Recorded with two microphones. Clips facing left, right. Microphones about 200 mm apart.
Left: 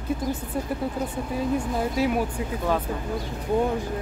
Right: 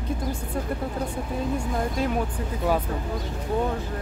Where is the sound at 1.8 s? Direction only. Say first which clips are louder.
Left 2 dB; 5° left (ahead or behind).